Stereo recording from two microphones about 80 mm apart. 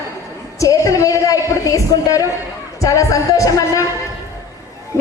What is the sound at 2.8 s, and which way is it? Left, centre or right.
Speech, left.